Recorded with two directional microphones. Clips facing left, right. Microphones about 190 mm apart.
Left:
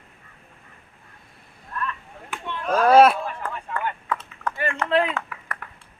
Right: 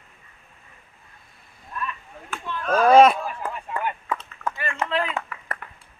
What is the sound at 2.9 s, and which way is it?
Speech, 5° left (ahead or behind).